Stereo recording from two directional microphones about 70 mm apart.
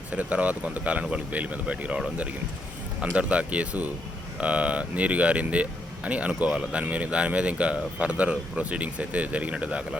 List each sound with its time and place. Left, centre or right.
0.1 s speech: centre